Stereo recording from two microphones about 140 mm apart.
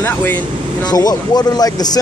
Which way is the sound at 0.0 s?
15° left (ahead or behind).